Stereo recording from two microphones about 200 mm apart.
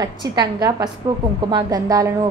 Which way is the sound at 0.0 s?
20° right (ahead or behind).